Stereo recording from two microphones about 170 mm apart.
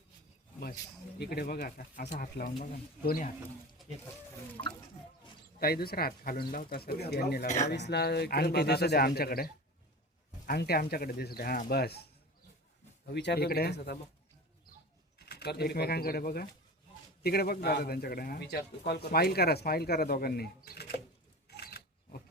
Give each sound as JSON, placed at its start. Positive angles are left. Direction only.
{"t": 1.2, "sound": "speech", "side_deg": 65}
{"t": 4.6, "sound": "music", "side_deg": 25}
{"t": 5.5, "sound": "speech", "side_deg": 65}
{"t": 7.4, "sound": "speech", "side_deg": 45}
{"t": 7.7, "sound": "a man's voice", "side_deg": 80}
{"t": 13.1, "sound": "a man's voice", "side_deg": 80}
{"t": 15.2, "sound": "a man's voice", "side_deg": 70}
{"t": 21.5, "sound": "a sound", "side_deg": 70}